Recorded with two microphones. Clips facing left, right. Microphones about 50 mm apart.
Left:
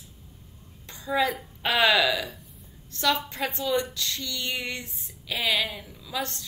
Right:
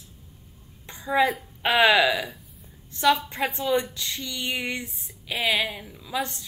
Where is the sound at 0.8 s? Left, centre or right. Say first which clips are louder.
Right 3 dB; right.